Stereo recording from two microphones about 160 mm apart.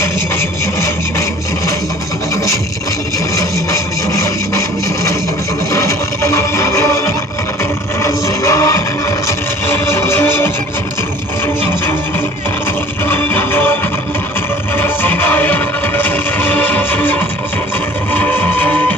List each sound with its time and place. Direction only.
3.3 s music: 20° left (ahead or behind)
5.7 s music: 20° left (ahead or behind)
13.1 s music: 15° left (ahead or behind)
14.8 s music: 15° left (ahead or behind)